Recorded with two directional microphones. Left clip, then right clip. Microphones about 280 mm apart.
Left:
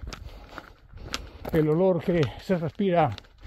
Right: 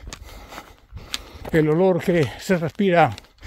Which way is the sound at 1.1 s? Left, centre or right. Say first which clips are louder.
Right 4 dB; right.